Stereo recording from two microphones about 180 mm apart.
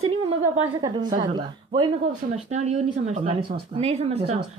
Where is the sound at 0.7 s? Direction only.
25° right (ahead or behind).